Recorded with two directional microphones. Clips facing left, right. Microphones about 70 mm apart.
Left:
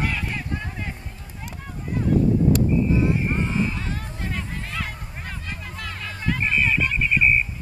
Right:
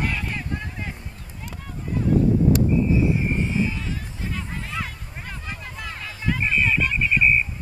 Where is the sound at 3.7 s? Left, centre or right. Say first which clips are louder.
Left 1 dB; left.